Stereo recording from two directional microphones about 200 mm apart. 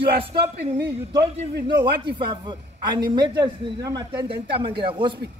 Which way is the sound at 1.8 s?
25° right (ahead or behind).